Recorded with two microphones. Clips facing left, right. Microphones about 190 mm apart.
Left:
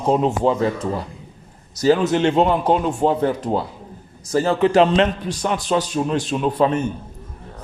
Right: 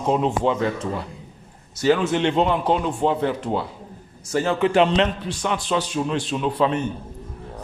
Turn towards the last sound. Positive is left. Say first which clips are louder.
# left 3 dB
turn(degrees=45)  # may be behind; listen again after turning